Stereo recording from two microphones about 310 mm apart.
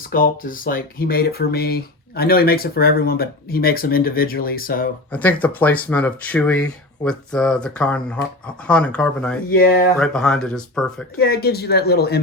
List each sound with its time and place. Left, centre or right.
0.1 s speech: left
5.1 s speech: centre
9.5 s speech: left
10.0 s speech: centre
11.2 s speech: left